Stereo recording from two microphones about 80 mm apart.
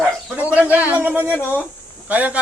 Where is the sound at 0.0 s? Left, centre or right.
Right.